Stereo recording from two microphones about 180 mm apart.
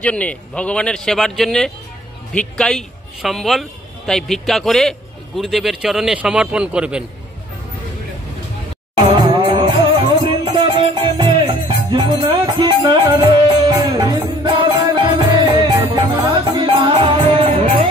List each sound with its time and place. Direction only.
0.0 s a man's voice: 5° left (ahead or behind)
8.9 s music: 30° right (ahead or behind)